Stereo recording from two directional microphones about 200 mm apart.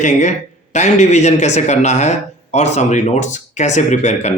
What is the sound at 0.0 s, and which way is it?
Speech, 35° left (ahead or behind).